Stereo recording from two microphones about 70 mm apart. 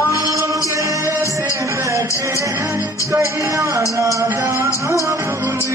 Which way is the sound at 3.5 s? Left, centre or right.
Right.